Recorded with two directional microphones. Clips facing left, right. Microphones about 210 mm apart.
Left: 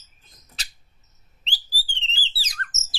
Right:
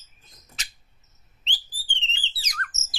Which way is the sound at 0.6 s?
35° left (ahead or behind).